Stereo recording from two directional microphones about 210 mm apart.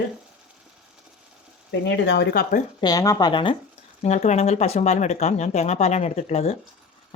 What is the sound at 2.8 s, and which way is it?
Speech, 20° left (ahead or behind).